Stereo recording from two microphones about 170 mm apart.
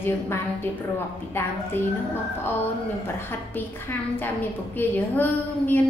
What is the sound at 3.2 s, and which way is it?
A woman's voice, 15° left (ahead or behind).